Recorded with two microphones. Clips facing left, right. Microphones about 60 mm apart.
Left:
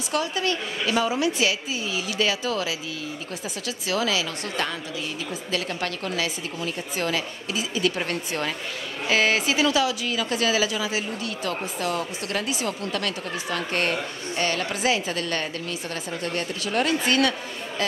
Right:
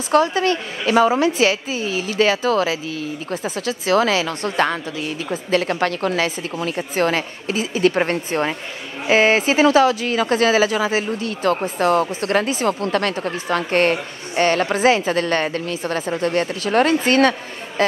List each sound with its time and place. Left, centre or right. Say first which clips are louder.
0.1 s a woman's voice: right 9 dB; right
5.7 s a woman's voice: right 9 dB; right